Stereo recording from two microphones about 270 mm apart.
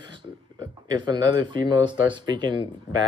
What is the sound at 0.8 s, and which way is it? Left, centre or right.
Speech, centre.